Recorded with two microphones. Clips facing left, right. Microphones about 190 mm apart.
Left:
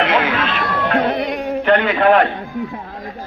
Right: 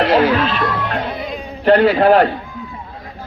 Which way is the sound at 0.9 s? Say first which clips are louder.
Left 6 dB; 70° left (ahead or behind).